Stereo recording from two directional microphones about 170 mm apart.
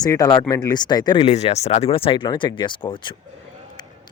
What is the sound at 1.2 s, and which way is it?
Speech, 40° left (ahead or behind).